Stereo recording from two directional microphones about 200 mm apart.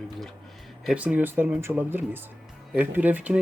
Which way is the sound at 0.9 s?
5° right (ahead or behind).